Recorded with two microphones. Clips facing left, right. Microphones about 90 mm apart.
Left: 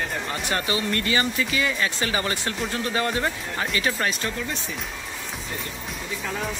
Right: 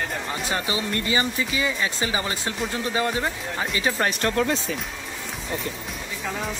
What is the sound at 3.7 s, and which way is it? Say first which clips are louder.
Speech: right 2 dB; 25° right (ahead or behind).